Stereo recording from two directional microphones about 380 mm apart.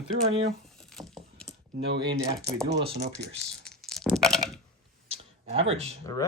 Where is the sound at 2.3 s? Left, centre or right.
Centre.